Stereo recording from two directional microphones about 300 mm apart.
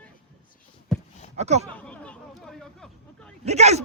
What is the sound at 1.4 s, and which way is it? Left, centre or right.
Speech, right.